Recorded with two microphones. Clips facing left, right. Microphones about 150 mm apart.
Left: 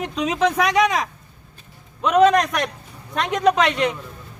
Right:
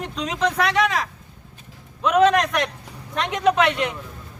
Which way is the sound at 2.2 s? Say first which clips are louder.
Left 1 dB; 5° left (ahead or behind).